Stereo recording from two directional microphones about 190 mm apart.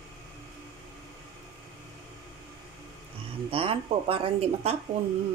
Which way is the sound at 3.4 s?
30° right (ahead or behind).